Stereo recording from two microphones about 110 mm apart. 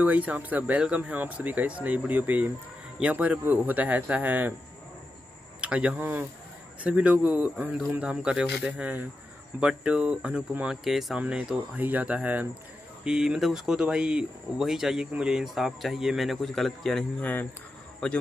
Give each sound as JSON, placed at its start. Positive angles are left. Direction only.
{"t": 0.0, "sound": "speech", "side_deg": -15}
{"t": 5.6, "sound": "speech", "side_deg": -10}
{"t": 17.2, "sound": "speech", "side_deg": 15}